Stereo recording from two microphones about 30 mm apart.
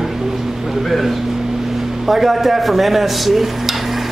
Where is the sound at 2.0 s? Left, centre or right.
Centre.